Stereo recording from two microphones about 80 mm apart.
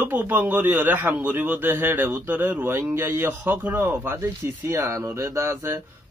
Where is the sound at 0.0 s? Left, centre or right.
Right.